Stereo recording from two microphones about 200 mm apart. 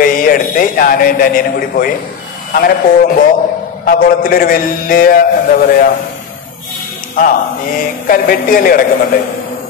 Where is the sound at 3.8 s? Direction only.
45° left (ahead or behind).